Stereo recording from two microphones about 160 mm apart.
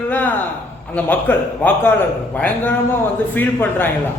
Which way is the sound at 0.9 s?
10° left (ahead or behind).